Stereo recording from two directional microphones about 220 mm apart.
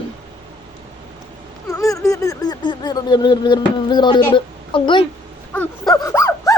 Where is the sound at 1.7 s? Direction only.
15° left (ahead or behind).